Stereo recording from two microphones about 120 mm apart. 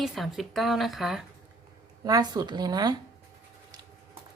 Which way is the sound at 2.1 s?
35° right (ahead or behind).